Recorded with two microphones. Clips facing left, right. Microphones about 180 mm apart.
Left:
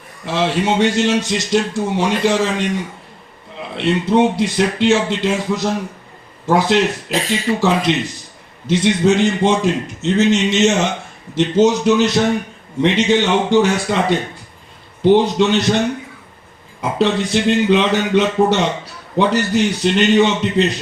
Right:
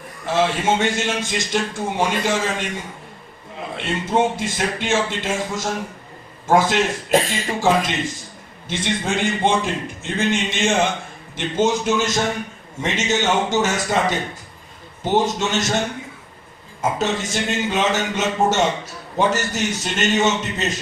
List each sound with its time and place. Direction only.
0.3 s speech: 50° right (ahead or behind)
3.8 s speech: 45° right (ahead or behind)
17.0 s speech: 45° right (ahead or behind)